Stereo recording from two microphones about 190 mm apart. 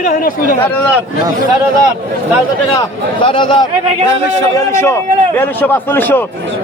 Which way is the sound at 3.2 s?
25° left (ahead or behind).